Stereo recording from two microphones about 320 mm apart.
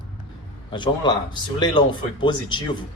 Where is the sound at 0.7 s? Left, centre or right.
Centre.